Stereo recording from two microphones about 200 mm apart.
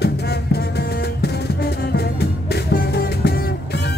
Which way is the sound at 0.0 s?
55° left (ahead or behind).